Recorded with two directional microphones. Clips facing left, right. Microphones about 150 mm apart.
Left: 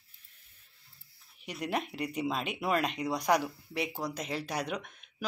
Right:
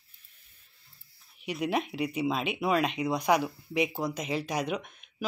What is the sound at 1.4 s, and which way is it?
A woman's voice, 10° right (ahead or behind).